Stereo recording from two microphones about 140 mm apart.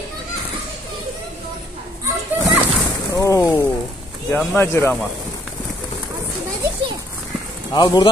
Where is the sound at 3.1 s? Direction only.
20° left (ahead or behind).